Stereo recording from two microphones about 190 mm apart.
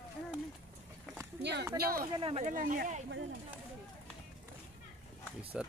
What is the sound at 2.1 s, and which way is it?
Speech, 30° right (ahead or behind).